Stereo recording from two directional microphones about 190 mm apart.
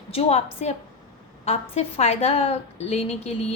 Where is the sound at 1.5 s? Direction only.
35° left (ahead or behind).